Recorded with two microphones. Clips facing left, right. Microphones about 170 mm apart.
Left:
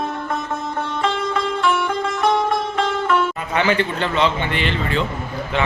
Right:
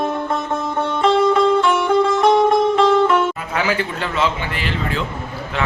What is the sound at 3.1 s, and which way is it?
A man's voice, 5° right (ahead or behind).